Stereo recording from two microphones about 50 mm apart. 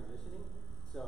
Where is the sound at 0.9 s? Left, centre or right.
Centre.